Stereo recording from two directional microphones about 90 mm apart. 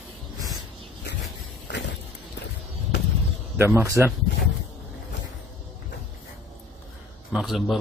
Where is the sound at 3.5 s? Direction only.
25° right (ahead or behind).